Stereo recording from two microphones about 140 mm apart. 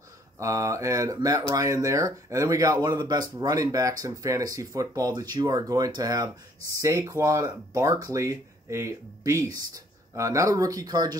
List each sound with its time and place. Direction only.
0.4 s speech: 20° right (ahead or behind)